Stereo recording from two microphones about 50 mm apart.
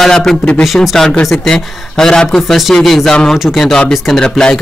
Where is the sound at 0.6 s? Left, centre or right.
Centre.